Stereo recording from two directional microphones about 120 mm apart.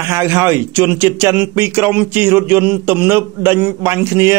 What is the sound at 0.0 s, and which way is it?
Speech, 20° right (ahead or behind).